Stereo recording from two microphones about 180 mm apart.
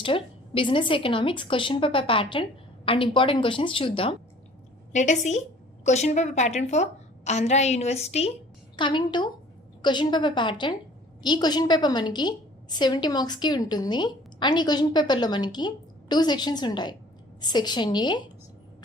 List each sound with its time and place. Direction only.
0.0 s a woman's voice: 30° left (ahead or behind)
4.9 s a woman's voice: 45° left (ahead or behind); by 18.2 s 25° left (ahead or behind)